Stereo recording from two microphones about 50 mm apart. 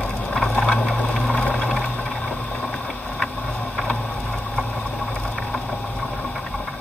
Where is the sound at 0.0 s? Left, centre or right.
Left.